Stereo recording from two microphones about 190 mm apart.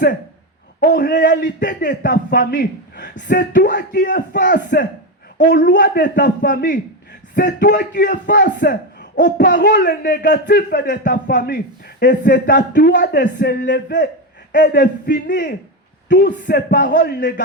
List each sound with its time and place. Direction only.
0.8 s a man's voice: 50° left (ahead or behind)